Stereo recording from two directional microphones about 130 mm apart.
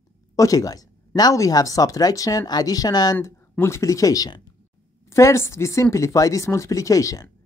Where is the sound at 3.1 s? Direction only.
15° left (ahead or behind).